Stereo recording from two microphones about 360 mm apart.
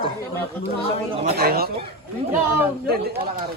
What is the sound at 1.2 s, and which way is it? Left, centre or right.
Speech, right.